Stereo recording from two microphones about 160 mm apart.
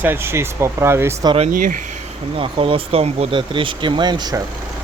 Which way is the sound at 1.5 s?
55° right (ahead or behind).